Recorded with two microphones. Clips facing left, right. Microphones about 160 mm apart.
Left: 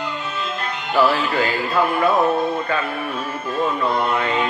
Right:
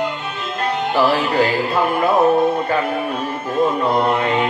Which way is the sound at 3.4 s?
40° right (ahead or behind).